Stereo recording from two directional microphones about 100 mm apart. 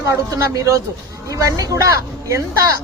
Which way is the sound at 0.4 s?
35° right (ahead or behind).